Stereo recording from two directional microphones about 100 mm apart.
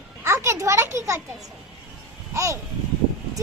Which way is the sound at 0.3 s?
30° right (ahead or behind).